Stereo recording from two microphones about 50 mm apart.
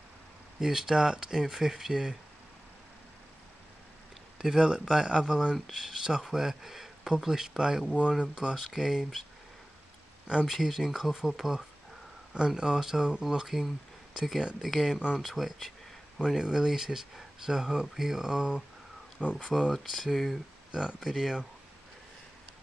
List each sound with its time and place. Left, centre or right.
0.6 s speech: centre
4.4 s speech: centre
10.4 s speech: centre
12.4 s speech: centre
16.3 s speech: centre
20.7 s speech: centre